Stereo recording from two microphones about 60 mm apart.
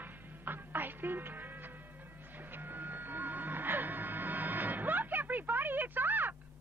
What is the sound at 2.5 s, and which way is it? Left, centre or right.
Music, right.